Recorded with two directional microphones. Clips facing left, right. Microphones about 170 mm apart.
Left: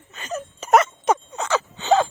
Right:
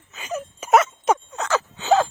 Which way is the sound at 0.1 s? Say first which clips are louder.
Right 1 dB; 10° right (ahead or behind).